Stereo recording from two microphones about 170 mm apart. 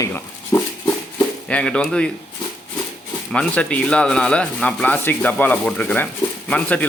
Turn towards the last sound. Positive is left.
turn(degrees=10)  # may be behind; listen again after turning